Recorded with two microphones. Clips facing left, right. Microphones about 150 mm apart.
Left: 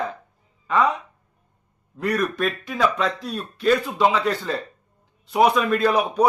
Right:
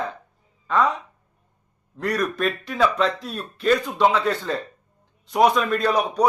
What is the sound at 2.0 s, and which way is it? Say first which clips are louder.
Speech: left 1 dB; centre (ahead or behind).